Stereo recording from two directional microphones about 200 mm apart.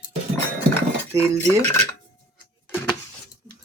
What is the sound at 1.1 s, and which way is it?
Cutlery, 15° right (ahead or behind).